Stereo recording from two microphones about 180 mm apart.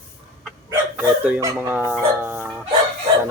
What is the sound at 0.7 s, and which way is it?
Speech, 10° right (ahead or behind).